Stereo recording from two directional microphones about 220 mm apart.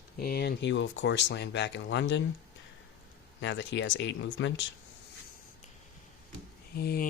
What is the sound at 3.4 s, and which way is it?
Speech, 55° left (ahead or behind).